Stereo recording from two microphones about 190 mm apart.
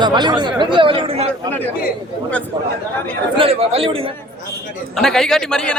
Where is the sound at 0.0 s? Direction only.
25° right (ahead or behind).